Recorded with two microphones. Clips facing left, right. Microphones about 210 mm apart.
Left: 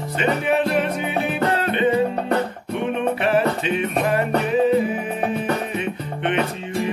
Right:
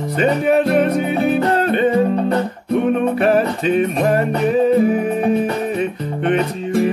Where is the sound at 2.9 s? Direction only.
40° right (ahead or behind).